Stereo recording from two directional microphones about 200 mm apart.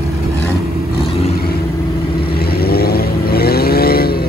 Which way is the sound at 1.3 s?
50° left (ahead or behind).